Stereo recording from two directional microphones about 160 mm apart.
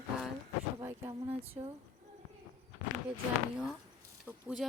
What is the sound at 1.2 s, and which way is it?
Speech, 40° right (ahead or behind).